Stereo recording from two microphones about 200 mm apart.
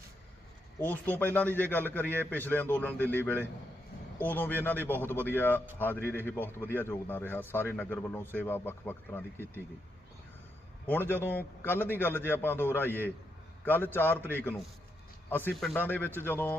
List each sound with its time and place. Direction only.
0.8 s a man's voice: 10° left (ahead or behind)
10.8 s a man's voice: 10° left (ahead or behind)